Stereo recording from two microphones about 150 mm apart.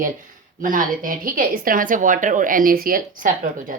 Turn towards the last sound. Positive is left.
turn(degrees=-65)  # may be behind; listen again after turning